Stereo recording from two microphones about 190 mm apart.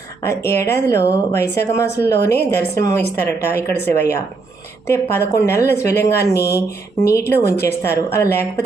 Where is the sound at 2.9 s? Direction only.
10° left (ahead or behind).